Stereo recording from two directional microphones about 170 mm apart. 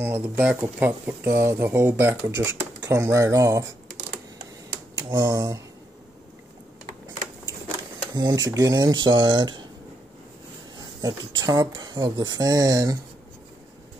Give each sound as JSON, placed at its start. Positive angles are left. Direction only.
{"t": 0.0, "sound": "speech", "side_deg": -10}
{"t": 4.9, "sound": "speech", "side_deg": -20}
{"t": 8.1, "sound": "speech", "side_deg": -25}
{"t": 11.0, "sound": "speech", "side_deg": -20}